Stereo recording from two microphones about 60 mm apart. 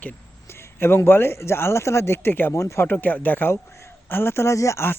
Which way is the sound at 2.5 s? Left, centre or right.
Left.